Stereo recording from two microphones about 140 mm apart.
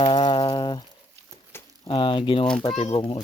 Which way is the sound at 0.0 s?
35° left (ahead or behind).